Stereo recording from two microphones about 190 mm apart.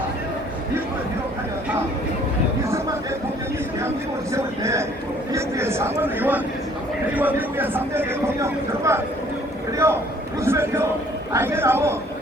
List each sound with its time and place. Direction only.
4.3 s speech: 15° right (ahead or behind)